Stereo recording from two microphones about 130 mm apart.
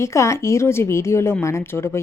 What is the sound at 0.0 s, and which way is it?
A woman's voice, 20° left (ahead or behind).